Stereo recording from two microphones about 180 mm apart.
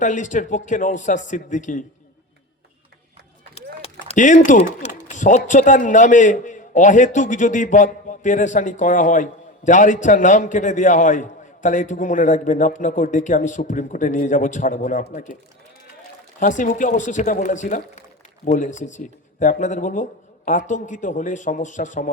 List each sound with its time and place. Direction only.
0.0 s speech: 45° left (ahead or behind)
3.8 s speech: 40° left (ahead or behind)
16.4 s speech: 45° left (ahead or behind)